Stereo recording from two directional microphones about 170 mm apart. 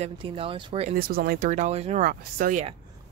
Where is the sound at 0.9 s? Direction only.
60° right (ahead or behind); by 2.0 s 40° right (ahead or behind).